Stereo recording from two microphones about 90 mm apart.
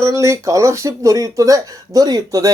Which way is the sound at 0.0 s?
35° right (ahead or behind).